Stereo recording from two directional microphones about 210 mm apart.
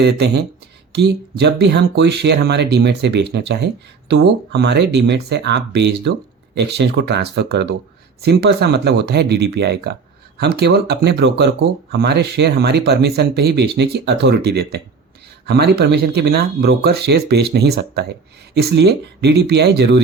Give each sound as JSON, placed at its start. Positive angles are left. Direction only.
{"t": 0.0, "sound": "speech", "side_deg": -55}